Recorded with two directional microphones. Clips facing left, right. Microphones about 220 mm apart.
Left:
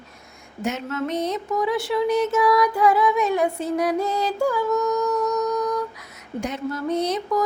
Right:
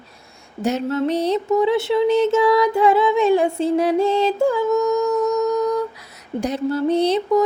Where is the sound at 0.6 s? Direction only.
35° right (ahead or behind).